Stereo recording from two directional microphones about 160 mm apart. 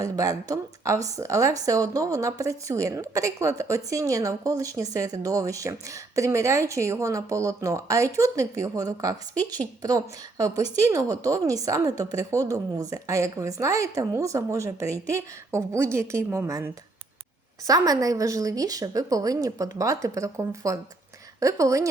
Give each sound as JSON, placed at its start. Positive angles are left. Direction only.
{"t": 0.0, "sound": "a woman's voice", "side_deg": -20}